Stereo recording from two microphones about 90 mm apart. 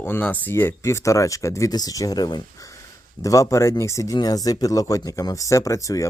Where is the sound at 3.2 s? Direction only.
35° left (ahead or behind).